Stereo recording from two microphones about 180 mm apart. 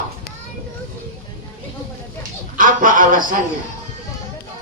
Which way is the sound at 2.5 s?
50° right (ahead or behind).